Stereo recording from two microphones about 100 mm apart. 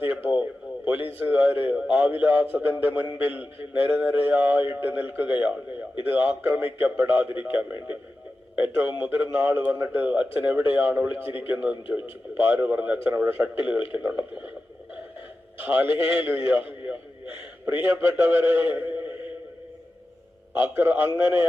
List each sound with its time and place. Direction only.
0.0 s radio: 15° right (ahead or behind)
1.2 s a man's voice: 15° right (ahead or behind)
15.6 s a man's voice: 20° right (ahead or behind)
20.6 s a man's voice: 20° right (ahead or behind)